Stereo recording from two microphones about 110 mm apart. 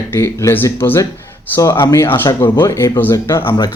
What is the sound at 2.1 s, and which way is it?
Speech, 45° left (ahead or behind).